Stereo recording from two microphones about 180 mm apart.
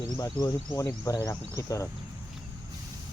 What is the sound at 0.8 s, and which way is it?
Speech, 20° left (ahead or behind).